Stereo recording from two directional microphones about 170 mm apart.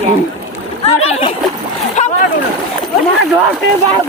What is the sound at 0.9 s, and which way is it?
Splash, 35° left (ahead or behind).